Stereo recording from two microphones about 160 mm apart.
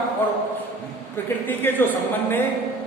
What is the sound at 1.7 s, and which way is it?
Speech, 15° left (ahead or behind).